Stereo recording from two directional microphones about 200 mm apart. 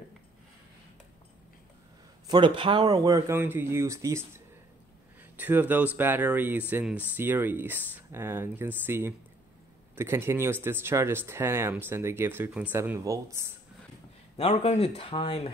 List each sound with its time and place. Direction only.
2.2 s speech: 20° right (ahead or behind)
5.4 s speech: 10° right (ahead or behind)
14.3 s speech: 30° left (ahead or behind)